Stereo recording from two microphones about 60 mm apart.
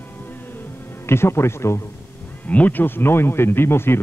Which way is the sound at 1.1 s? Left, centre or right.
Left.